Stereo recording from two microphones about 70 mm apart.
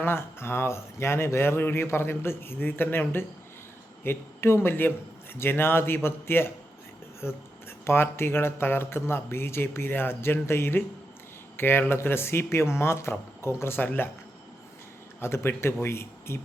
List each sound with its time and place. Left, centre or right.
0.0 s speech: left
15.2 s speech: left